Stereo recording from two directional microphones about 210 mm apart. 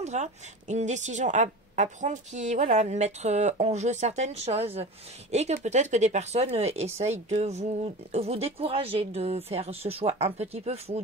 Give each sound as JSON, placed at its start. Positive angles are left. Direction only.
{"t": 0.0, "sound": "speech", "side_deg": -35}